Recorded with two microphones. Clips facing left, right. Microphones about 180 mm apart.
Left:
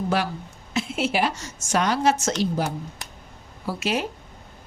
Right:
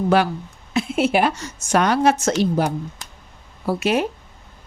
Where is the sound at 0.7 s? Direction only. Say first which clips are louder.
Right 6 dB; 55° right (ahead or behind).